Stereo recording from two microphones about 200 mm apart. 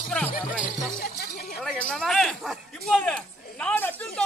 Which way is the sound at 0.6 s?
45° left (ahead or behind).